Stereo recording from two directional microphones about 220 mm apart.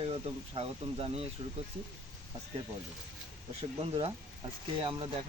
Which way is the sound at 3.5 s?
25° right (ahead or behind).